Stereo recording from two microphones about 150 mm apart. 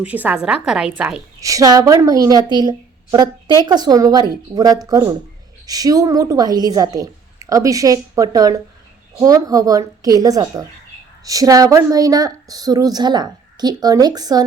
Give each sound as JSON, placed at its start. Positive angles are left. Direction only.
{"t": 0.0, "sound": "a woman's voice", "side_deg": -10}
{"t": 1.4, "sound": "a woman's voice", "side_deg": -20}